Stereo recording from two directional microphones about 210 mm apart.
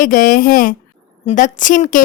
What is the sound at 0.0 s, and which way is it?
A woman's voice, 40° left (ahead or behind).